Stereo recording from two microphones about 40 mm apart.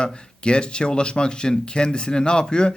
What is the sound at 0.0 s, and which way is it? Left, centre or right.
Speech, left.